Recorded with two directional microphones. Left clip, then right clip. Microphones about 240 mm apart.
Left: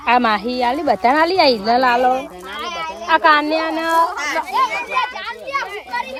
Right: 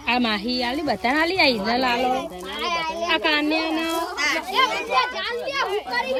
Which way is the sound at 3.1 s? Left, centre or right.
Left.